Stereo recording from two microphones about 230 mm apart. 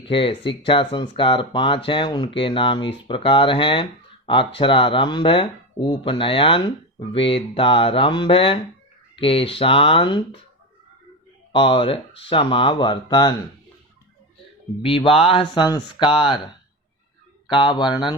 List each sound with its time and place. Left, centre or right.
0.1 s speech: left
11.5 s speech: left
14.8 s speech: left
17.5 s speech: centre